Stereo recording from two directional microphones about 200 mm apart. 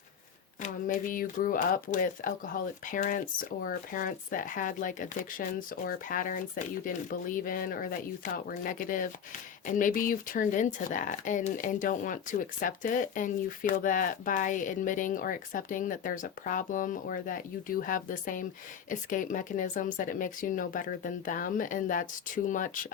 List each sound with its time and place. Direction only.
0.6 s speech: 40° left (ahead or behind)